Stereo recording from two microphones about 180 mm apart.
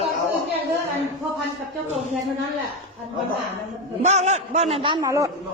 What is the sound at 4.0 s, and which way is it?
A man's voice, 40° right (ahead or behind).